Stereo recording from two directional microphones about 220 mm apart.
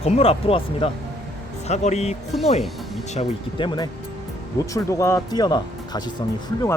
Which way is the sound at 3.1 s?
20° left (ahead or behind).